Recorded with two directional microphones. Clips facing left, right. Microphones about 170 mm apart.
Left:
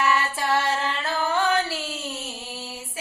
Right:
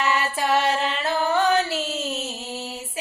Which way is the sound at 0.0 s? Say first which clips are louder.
Even; 20° right (ahead or behind).